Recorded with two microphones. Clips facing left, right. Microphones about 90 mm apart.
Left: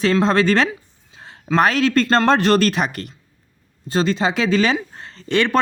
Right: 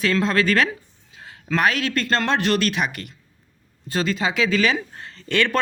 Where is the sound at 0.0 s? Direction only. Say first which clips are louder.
Left 4 dB; 25° left (ahead or behind).